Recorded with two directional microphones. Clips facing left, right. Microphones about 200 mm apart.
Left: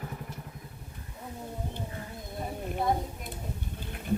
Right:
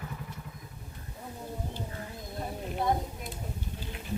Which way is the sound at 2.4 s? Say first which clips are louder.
Left 1 dB; 5° left (ahead or behind).